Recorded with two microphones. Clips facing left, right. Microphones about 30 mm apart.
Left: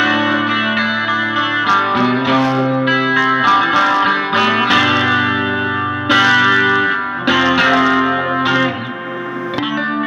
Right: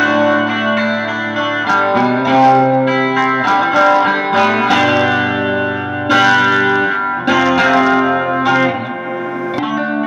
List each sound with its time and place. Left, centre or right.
0.0 s music: left
2.4 s music: centre
2.8 s music: left; by 8.1 s centre